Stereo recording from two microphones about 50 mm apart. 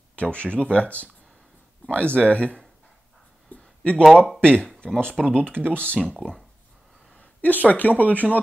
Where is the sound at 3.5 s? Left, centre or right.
Left.